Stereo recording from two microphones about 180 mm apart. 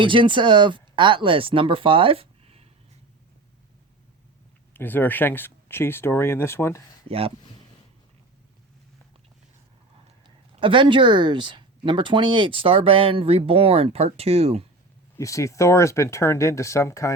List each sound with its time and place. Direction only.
0.0 s speech: 25° right (ahead or behind)
4.7 s speech: 10° left (ahead or behind)
7.1 s speech: 30° right (ahead or behind)
10.2 s speech: 30° right (ahead or behind)
15.1 s speech: 15° left (ahead or behind)